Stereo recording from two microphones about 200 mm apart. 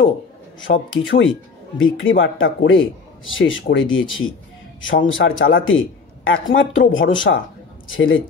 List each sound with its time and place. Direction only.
0.6 s speech: 75° left (ahead or behind)